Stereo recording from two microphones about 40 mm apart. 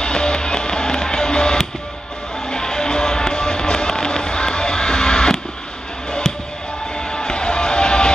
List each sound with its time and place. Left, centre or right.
0.0 s music: left
7.1 s music: centre